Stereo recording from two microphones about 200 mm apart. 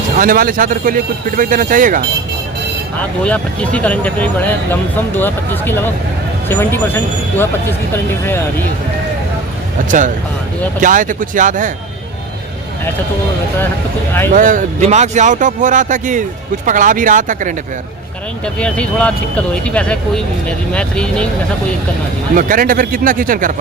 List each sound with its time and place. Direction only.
0.2 s a man's voice: 45° right (ahead or behind)
3.2 s speech: 5° left (ahead or behind)
10.8 s speech: 40° right (ahead or behind)
14.3 s speech: 40° right (ahead or behind)
18.4 s speech: 5° left (ahead or behind)
22.4 s a man's voice: 45° right (ahead or behind)